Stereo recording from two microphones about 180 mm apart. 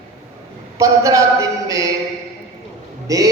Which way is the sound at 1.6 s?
20° right (ahead or behind).